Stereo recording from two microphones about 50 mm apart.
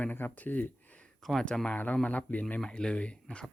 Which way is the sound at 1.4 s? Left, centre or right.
Centre.